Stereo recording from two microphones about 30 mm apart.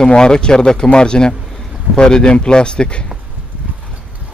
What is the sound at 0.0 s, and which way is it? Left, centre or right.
Speech, left.